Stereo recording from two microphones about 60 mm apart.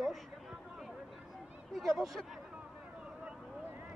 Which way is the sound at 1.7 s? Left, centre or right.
Centre.